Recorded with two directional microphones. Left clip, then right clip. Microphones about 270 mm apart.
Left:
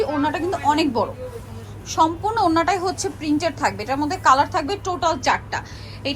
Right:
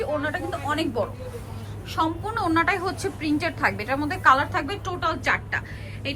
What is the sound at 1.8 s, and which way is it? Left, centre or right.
A woman's voice, centre.